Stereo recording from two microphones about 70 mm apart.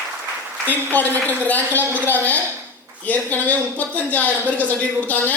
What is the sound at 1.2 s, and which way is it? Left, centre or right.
Speech, left.